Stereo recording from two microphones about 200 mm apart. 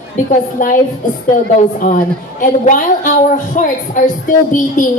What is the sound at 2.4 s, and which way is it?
A woman's voice, 40° left (ahead or behind).